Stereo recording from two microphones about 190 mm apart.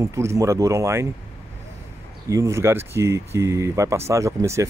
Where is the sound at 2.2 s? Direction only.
15° right (ahead or behind).